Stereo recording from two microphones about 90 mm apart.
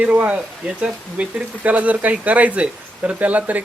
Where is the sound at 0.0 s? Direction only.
15° right (ahead or behind).